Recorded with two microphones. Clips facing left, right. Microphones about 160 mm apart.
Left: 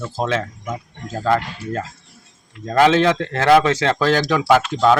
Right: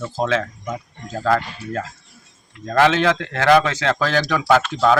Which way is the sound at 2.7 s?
25° left (ahead or behind).